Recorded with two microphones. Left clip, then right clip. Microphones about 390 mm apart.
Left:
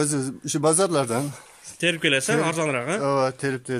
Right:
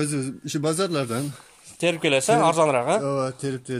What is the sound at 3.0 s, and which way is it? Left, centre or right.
Speech, left.